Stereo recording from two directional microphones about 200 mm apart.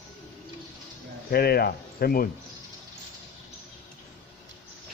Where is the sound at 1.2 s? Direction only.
50° left (ahead or behind).